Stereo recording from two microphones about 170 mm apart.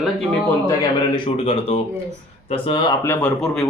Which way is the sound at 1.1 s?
30° left (ahead or behind).